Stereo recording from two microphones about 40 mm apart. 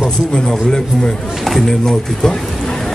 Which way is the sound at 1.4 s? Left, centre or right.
Centre.